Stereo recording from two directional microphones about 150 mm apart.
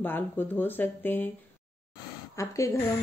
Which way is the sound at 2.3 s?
20° left (ahead or behind).